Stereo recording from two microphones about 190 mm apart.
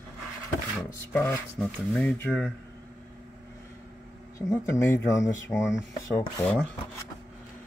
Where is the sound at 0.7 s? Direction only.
10° left (ahead or behind).